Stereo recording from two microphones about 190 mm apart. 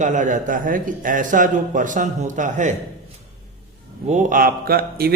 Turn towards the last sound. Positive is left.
turn(degrees=-55)  # may be behind; listen again after turning